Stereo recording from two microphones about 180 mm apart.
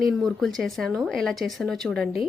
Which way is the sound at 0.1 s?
Centre (ahead or behind).